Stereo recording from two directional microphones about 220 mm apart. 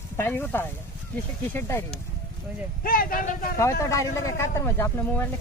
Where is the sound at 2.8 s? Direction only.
40° left (ahead or behind).